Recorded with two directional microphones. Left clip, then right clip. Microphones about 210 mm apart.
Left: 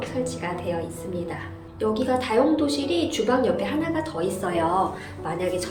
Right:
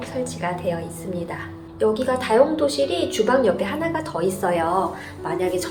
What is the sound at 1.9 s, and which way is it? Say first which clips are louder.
A woman's voice: right 1 dB; 10° right (ahead or behind).